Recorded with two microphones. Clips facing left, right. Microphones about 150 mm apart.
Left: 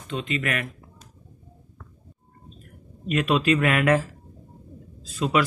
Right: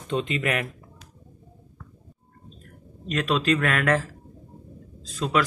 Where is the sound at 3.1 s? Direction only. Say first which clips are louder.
Left 2 dB; 5° left (ahead or behind).